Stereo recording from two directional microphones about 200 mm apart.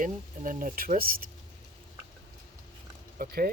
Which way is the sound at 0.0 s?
45° right (ahead or behind).